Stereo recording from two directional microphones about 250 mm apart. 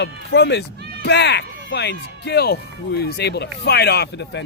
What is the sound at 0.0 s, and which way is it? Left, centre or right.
A man's voice, left.